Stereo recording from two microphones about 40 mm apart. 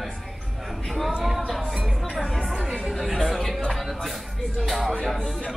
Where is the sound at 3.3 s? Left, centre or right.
Centre.